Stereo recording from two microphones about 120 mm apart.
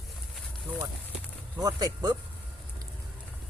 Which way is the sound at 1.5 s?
30° right (ahead or behind).